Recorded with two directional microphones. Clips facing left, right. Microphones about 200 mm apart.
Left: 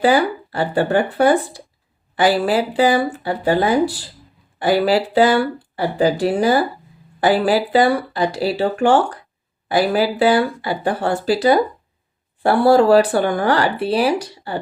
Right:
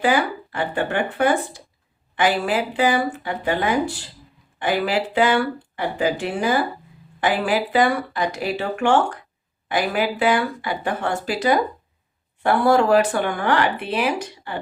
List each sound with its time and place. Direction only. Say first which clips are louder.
0.0 s speech: left 4 dB; 35° left (ahead or behind)